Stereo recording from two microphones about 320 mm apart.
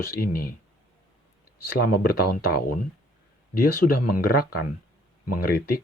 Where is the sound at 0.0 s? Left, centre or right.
Left.